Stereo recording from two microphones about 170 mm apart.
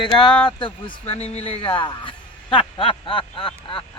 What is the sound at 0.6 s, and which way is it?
Speech, 30° left (ahead or behind).